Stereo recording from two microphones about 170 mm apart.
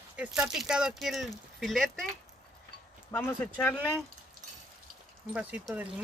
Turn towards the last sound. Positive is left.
turn(degrees=-10)  # may be behind; listen again after turning